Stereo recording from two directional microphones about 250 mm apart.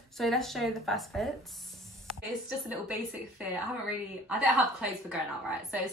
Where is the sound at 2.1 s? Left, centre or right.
Right.